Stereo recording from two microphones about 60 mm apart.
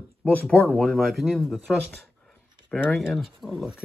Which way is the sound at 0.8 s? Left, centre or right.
Centre.